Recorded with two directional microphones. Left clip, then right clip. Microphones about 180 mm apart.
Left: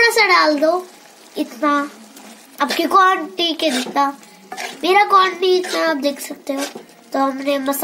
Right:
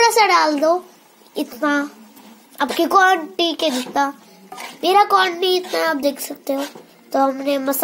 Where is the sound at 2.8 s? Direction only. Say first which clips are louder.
Even; 20° right (ahead or behind).